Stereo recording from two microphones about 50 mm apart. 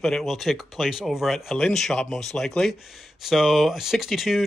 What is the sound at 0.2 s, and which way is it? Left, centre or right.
Speech, centre.